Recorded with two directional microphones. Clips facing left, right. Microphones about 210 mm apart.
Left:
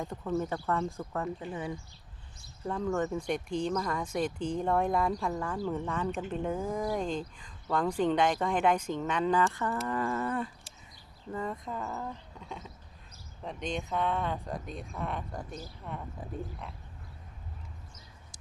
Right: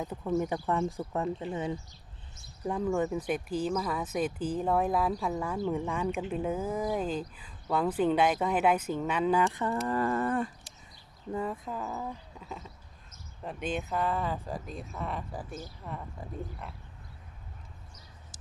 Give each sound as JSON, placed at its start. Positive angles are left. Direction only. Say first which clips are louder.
{"t": 0.0, "sound": "speech", "louder": "right 2 dB", "side_deg": -5}
{"t": 2.6, "sound": "speech", "louder": "right 2 dB", "side_deg": -10}
{"t": 9.5, "sound": "speech", "louder": "right 2 dB", "side_deg": -20}
{"t": 9.8, "sound": "a sound", "louder": "right 4 dB", "side_deg": -40}
{"t": 11.3, "sound": "speech", "louder": "right 2 dB", "side_deg": -10}